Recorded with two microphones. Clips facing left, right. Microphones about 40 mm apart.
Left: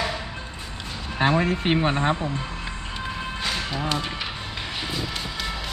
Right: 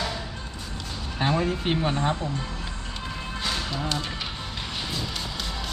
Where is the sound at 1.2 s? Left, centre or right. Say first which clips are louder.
Left 4 dB; left.